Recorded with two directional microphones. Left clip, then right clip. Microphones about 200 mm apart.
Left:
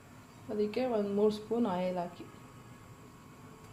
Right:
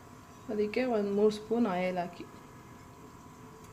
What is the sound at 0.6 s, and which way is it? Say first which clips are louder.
Speech: right 2 dB; 15° right (ahead or behind).